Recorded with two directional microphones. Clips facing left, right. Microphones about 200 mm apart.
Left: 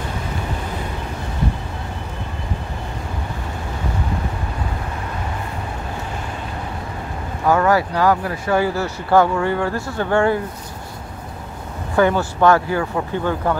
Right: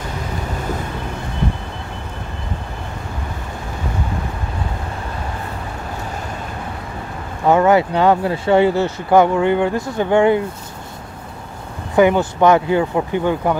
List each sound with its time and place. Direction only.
7.4 s speech: 20° right (ahead or behind)
11.9 s speech: 15° right (ahead or behind)